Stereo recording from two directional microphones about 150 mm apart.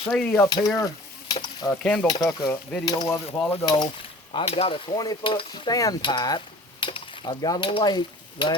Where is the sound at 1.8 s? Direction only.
5° left (ahead or behind).